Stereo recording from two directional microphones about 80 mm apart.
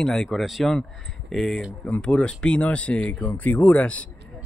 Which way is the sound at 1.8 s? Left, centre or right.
Centre.